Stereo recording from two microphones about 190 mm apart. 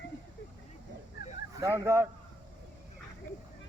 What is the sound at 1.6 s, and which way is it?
Speech, 15° right (ahead or behind).